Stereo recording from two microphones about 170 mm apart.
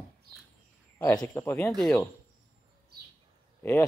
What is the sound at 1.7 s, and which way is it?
Speech, centre (ahead or behind).